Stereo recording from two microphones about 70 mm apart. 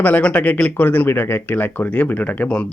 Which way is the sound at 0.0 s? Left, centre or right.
Left.